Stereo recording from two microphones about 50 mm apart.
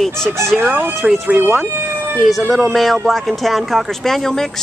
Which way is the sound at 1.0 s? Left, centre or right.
Right.